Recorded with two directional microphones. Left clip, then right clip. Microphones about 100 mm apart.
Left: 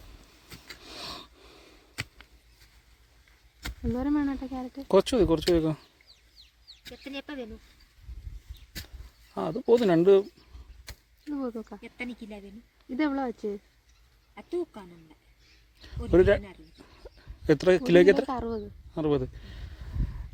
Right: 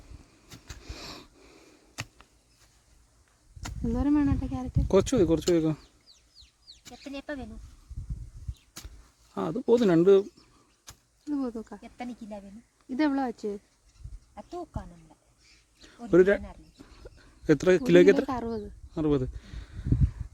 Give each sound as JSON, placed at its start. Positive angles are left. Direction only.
{"t": 0.8, "sound": "wheeze", "side_deg": -45}
{"t": 3.8, "sound": "speech", "side_deg": -5}
{"t": 4.8, "sound": "speech", "side_deg": -45}
{"t": 6.1, "sound": "chicken", "side_deg": 25}
{"t": 7.1, "sound": "a sound", "side_deg": -30}
{"t": 9.3, "sound": "speech", "side_deg": -50}
{"t": 11.3, "sound": "speech", "side_deg": -20}
{"t": 11.8, "sound": "speech", "side_deg": -70}
{"t": 12.9, "sound": "speech", "side_deg": -25}
{"t": 15.8, "sound": "speech", "side_deg": -55}
{"t": 16.8, "sound": "a sound", "side_deg": -50}
{"t": 18.3, "sound": "speech", "side_deg": -20}
{"t": 18.9, "sound": "speech", "side_deg": -45}